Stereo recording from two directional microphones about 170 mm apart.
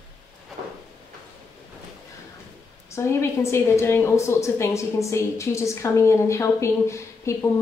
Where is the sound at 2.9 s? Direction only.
15° left (ahead or behind).